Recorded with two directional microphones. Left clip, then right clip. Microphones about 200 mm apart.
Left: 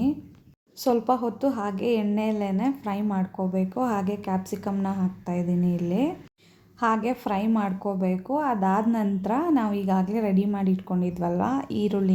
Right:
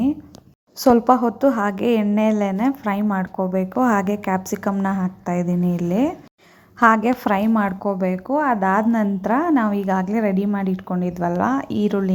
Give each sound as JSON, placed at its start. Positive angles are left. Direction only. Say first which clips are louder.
{"t": 0.8, "sound": "a woman's voice", "louder": "right 8 dB", "side_deg": -25}
{"t": 5.9, "sound": "a woman's voice", "louder": "right 6 dB", "side_deg": -10}
{"t": 6.7, "sound": "a woman's voice", "louder": "right 9 dB", "side_deg": -25}
{"t": 7.8, "sound": "a woman's voice", "louder": "right 6 dB", "side_deg": -30}
{"t": 8.0, "sound": "a woman's voice", "louder": "right 6 dB", "side_deg": -15}